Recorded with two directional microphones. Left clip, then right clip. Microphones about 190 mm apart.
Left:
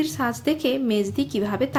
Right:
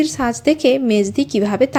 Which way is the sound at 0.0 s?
30° right (ahead or behind).